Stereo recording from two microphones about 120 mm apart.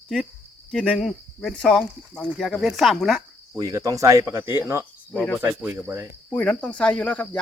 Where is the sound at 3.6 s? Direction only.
30° right (ahead or behind).